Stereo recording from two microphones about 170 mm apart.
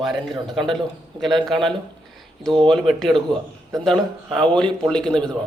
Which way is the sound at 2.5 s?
30° right (ahead or behind).